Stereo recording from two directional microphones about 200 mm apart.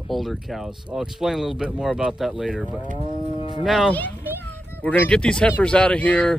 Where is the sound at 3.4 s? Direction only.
25° left (ahead or behind).